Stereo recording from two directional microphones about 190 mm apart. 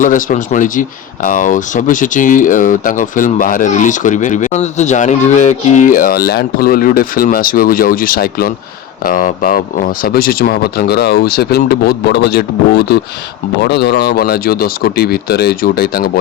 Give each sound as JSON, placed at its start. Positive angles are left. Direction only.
{"t": 0.0, "sound": "speech", "side_deg": 45}